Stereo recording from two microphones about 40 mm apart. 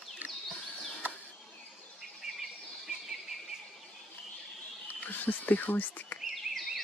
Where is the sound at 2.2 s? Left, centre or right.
Centre.